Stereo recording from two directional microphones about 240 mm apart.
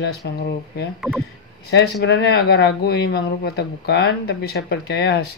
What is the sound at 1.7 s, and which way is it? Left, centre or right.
Speech, left.